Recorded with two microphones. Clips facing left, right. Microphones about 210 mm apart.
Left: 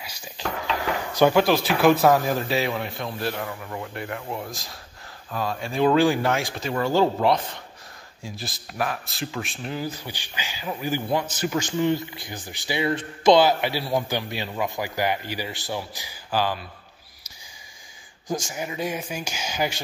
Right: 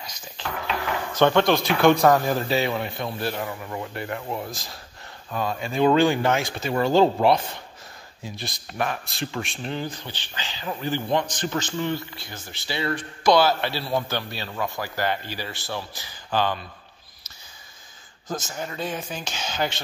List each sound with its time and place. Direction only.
1.1 s speech: 10° left (ahead or behind)
6.7 s speech: 20° right (ahead or behind)
8.2 s speech: centre (ahead or behind)
18.3 s speech: 15° left (ahead or behind)